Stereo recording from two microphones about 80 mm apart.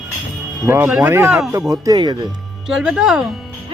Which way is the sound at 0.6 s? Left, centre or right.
Right.